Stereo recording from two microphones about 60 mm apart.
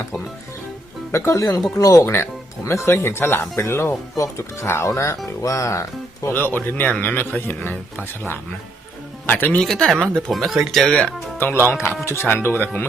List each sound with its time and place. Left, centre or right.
1.1 s speech: left
2.0 s speech: left
6.3 s speech: left
9.2 s speech: left
9.6 s speech: centre
11.3 s speech: left
12.3 s speech: left